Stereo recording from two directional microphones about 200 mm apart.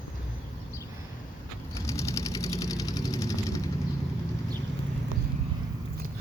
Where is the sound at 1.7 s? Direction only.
15° left (ahead or behind).